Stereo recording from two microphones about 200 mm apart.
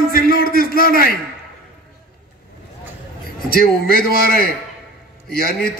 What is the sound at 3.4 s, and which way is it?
A man's voice, 50° left (ahead or behind).